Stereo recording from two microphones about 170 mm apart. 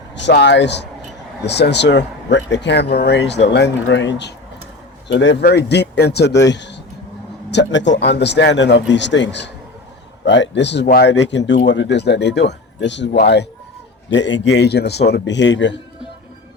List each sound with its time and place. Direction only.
0.2 s speech: 90° left; by 15.0 s 75° left (ahead or behind)
15.1 s speech: 90° left